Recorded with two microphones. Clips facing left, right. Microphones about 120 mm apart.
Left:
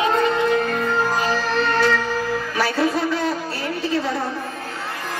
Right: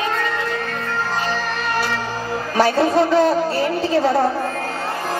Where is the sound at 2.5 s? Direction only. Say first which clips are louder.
Right 7 dB; 25° right (ahead or behind).